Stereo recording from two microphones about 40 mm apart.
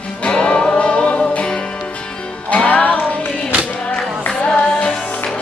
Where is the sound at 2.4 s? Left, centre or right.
Left.